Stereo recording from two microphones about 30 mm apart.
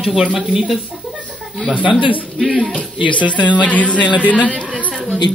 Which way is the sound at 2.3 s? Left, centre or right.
Centre.